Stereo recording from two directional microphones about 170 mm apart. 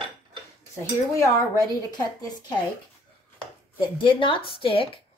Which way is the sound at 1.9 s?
25° left (ahead or behind).